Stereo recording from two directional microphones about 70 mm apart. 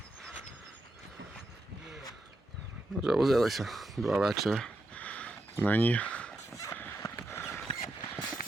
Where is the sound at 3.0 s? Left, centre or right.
Centre.